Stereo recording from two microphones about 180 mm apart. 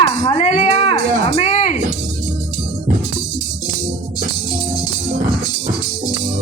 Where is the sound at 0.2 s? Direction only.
35° left (ahead or behind).